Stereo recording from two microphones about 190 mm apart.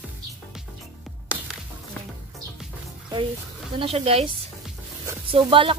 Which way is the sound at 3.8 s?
30° right (ahead or behind).